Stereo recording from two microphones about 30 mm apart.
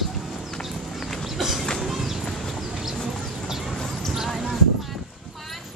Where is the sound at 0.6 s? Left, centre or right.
Centre.